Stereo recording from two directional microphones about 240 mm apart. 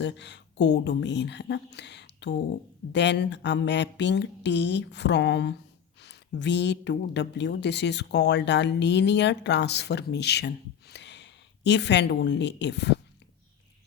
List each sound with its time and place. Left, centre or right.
0.0 s a woman's voice: left